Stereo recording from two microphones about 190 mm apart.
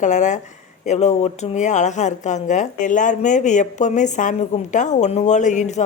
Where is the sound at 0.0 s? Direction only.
40° left (ahead or behind).